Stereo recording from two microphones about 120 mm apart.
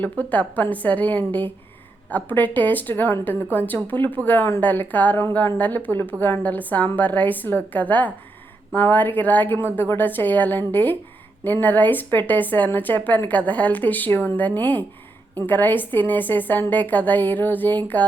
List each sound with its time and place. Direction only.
0.0 s a woman's voice: 15° left (ahead or behind)